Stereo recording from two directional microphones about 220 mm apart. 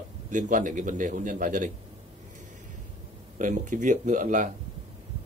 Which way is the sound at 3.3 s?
35° right (ahead or behind).